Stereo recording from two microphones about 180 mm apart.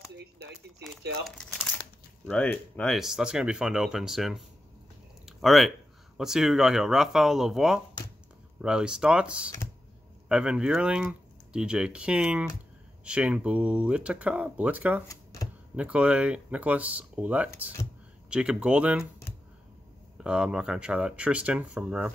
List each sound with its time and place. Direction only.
0.2 s speech: 90° right
1.2 s speech: centre (ahead or behind)
5.2 s a sound: centre (ahead or behind)
6.1 s speech: 5° right (ahead or behind)
20.2 s speech: 5° right (ahead or behind)